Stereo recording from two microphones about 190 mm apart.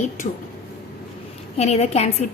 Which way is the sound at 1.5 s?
35° left (ahead or behind).